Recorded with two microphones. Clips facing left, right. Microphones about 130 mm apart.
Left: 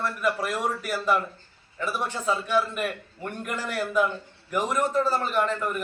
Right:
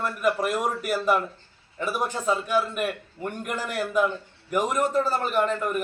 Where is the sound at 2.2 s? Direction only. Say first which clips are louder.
Even; 5° right (ahead or behind).